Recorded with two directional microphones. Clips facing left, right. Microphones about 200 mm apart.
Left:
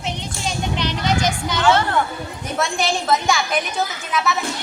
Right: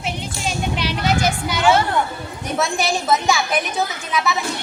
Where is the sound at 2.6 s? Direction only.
Centre (ahead or behind).